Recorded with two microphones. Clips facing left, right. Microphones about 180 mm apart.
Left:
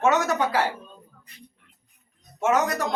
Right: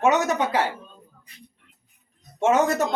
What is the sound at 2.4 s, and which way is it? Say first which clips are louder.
Speech: right 3 dB; 30° right (ahead or behind).